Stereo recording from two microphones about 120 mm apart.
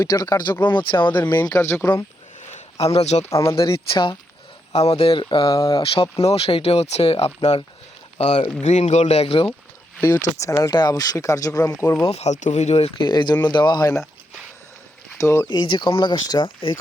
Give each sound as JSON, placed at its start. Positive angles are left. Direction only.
{"t": 0.0, "sound": "speech", "side_deg": 30}
{"t": 1.1, "sound": "speech", "side_deg": 15}
{"t": 2.9, "sound": "speech", "side_deg": 65}
{"t": 3.3, "sound": "speech", "side_deg": 25}
{"t": 3.7, "sound": "speech", "side_deg": 40}
{"t": 5.5, "sound": "speech", "side_deg": 30}
{"t": 5.8, "sound": "speech", "side_deg": 55}
{"t": 8.2, "sound": "speech", "side_deg": 75}
{"t": 10.2, "sound": "speech", "side_deg": 90}
{"t": 10.4, "sound": "speech", "side_deg": 30}
{"t": 12.0, "sound": "speech", "side_deg": 65}
{"t": 13.0, "sound": "speech", "side_deg": 40}
{"t": 15.2, "sound": "speech", "side_deg": 25}
{"t": 15.4, "sound": "speech", "side_deg": 40}